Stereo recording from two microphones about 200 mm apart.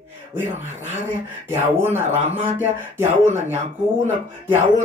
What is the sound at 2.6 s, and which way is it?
Speech, 10° right (ahead or behind).